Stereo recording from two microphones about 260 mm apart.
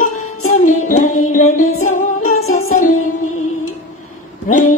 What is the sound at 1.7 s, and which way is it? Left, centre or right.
Music, left.